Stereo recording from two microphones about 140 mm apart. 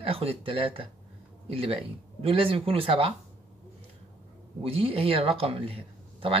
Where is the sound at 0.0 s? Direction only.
45° right (ahead or behind).